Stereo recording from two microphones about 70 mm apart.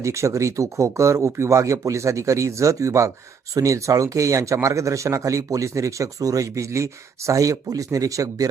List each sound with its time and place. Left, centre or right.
0.0 s speech: right